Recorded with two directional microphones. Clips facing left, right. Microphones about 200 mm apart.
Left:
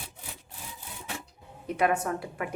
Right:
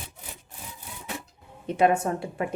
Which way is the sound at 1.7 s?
25° right (ahead or behind).